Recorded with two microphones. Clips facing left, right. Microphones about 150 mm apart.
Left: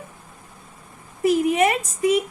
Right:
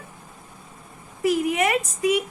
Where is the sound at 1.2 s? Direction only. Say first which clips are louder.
Left 3 dB; 30° left (ahead or behind).